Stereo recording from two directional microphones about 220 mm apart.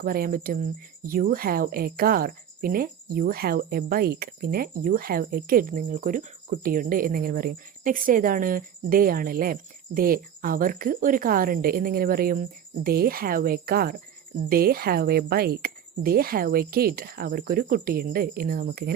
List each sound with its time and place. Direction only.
0.0 s speech: 40° right (ahead or behind)